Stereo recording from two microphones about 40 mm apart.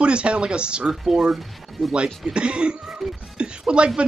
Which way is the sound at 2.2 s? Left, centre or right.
Right.